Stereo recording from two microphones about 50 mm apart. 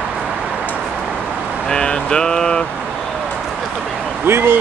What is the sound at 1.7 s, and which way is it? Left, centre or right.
Mantra, centre.